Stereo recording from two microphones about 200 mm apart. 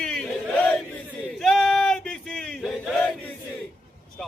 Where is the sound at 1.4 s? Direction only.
Centre (ahead or behind).